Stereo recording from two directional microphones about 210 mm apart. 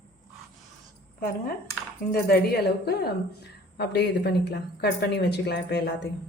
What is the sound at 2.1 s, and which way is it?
A woman's voice, 50° left (ahead or behind).